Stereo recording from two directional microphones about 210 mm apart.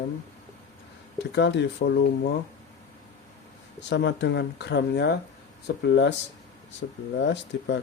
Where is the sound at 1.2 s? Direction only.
55° left (ahead or behind).